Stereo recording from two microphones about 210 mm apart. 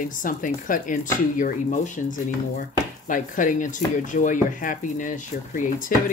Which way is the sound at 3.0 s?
40° left (ahead or behind).